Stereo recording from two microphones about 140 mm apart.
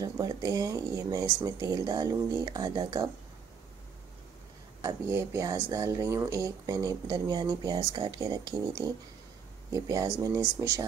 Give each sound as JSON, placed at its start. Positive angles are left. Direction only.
{"t": 0.0, "sound": "speech", "side_deg": -25}
{"t": 4.8, "sound": "speech", "side_deg": -20}